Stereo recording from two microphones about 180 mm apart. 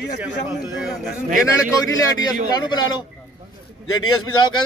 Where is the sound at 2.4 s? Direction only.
25° left (ahead or behind).